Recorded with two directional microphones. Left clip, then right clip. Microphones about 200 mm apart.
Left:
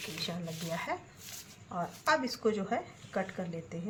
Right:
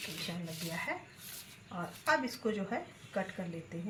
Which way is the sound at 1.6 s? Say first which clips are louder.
Left 3 dB; 15° left (ahead or behind).